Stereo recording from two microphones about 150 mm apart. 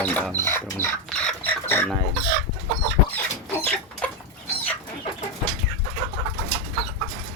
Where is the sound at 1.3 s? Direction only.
10° left (ahead or behind).